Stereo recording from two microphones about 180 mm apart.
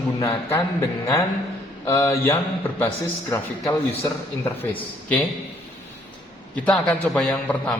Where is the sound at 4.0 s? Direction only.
10° left (ahead or behind).